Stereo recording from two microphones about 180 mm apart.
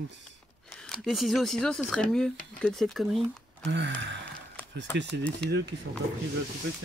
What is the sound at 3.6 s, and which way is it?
Gasp, 80° right.